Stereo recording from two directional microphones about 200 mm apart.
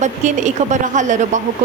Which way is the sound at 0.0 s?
35° right (ahead or behind).